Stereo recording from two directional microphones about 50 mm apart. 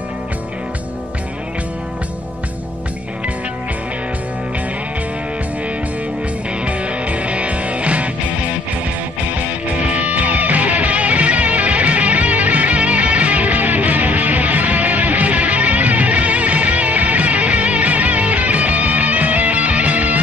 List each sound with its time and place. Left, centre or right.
6.6 s music: right
9.9 s music: right